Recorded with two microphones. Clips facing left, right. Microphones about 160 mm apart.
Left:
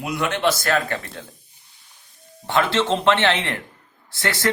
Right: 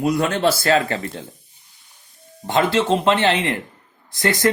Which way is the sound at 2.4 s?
15° right (ahead or behind).